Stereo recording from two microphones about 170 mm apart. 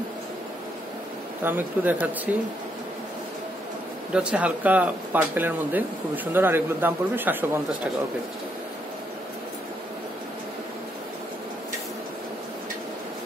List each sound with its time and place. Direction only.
1.4 s speech: 10° right (ahead or behind)
4.1 s speech: 5° right (ahead or behind)